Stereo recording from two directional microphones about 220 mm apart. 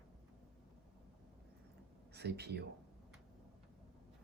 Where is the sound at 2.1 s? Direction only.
50° right (ahead or behind).